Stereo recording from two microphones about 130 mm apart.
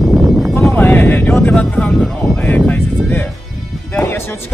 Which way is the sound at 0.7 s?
15° left (ahead or behind).